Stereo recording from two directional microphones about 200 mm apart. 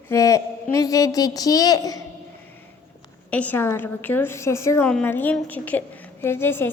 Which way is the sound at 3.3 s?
5° left (ahead or behind).